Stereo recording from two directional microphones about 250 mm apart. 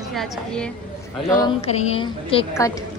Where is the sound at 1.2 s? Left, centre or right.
Centre.